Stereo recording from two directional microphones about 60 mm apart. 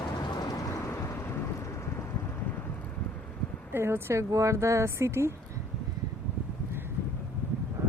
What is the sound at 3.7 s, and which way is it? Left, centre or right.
Speech, right.